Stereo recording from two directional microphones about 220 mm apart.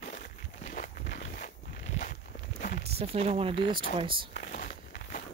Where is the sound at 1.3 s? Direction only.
35° left (ahead or behind).